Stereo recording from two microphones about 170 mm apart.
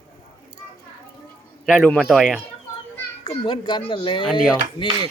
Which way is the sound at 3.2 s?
30° left (ahead or behind).